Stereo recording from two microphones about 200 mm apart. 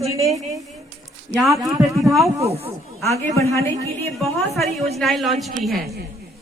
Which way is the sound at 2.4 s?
30° right (ahead or behind).